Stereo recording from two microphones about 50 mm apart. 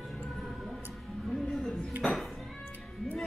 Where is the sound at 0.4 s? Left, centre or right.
Centre.